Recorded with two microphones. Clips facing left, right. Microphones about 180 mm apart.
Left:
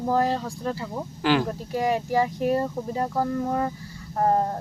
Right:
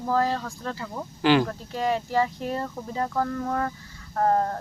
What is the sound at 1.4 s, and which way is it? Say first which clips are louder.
Speech: left 2 dB; 15° left (ahead or behind).